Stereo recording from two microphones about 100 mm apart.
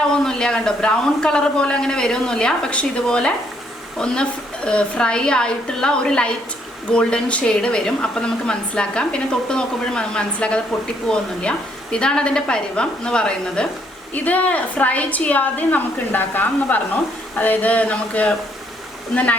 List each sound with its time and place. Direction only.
0.2 s a woman's voice: 5° left (ahead or behind)